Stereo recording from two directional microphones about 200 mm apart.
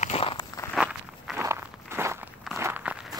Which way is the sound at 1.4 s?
15° right (ahead or behind).